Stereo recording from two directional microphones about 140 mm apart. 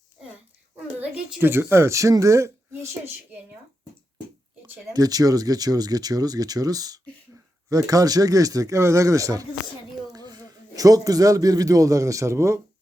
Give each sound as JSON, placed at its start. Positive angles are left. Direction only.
{"t": 0.9, "sound": "speech", "side_deg": -10}
{"t": 4.9, "sound": "a man's voice", "side_deg": -25}